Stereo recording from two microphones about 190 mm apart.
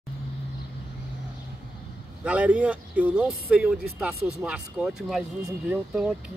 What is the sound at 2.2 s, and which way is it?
Speech, 5° right (ahead or behind).